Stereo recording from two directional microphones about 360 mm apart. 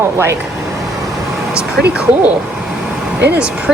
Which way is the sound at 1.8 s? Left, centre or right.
Centre.